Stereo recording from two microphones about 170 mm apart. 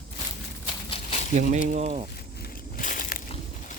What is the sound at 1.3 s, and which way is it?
Speech, 50° right (ahead or behind).